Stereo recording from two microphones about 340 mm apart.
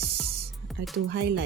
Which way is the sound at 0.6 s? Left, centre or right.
Centre.